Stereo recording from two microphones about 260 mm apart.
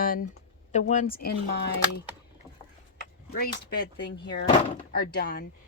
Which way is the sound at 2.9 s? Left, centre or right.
Left.